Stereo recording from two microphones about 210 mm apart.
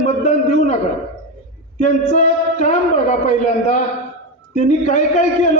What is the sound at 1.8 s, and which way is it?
A man's voice, 35° left (ahead or behind).